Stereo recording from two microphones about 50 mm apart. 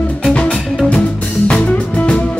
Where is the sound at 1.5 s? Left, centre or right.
Left.